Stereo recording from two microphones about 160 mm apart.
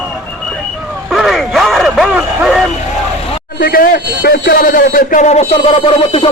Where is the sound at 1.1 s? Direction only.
Centre (ahead or behind).